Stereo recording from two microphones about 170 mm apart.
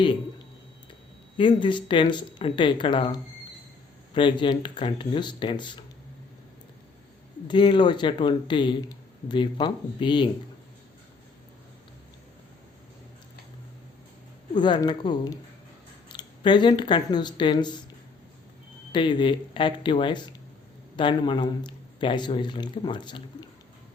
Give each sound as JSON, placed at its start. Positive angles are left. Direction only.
{"t": 1.4, "sound": "speech", "side_deg": 30}
{"t": 7.4, "sound": "speech", "side_deg": 25}
{"t": 14.5, "sound": "speech", "side_deg": 25}
{"t": 18.9, "sound": "speech", "side_deg": 25}